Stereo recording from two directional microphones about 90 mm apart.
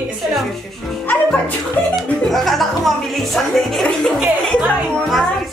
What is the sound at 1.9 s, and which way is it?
Speech, centre (ahead or behind).